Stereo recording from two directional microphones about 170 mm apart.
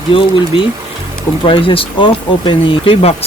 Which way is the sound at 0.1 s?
30° left (ahead or behind).